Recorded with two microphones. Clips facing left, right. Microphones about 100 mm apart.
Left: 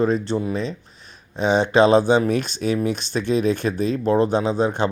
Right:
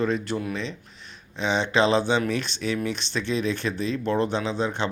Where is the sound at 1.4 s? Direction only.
45° left (ahead or behind).